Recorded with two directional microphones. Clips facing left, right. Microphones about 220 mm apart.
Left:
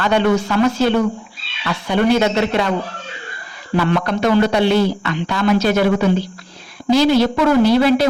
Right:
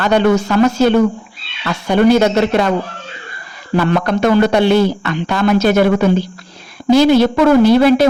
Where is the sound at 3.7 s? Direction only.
45° right (ahead or behind).